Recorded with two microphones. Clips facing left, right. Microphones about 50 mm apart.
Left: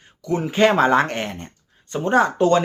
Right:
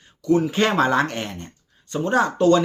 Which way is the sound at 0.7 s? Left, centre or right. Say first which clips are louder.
Left 3 dB; left.